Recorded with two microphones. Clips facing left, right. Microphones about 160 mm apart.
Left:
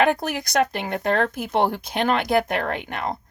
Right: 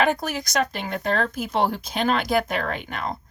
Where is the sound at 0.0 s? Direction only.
55° left (ahead or behind).